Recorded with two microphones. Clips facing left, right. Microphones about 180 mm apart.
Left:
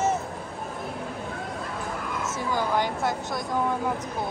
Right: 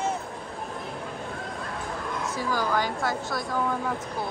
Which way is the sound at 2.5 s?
20° left (ahead or behind).